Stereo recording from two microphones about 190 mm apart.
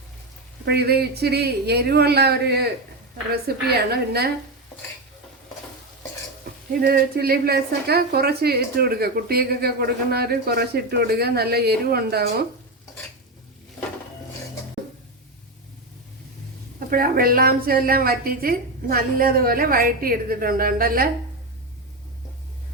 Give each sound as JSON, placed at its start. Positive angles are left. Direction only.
{"t": 0.6, "sound": "a woman's voice", "side_deg": -60}
{"t": 6.7, "sound": "a woman's voice", "side_deg": -55}
{"t": 16.9, "sound": "a woman's voice", "side_deg": -50}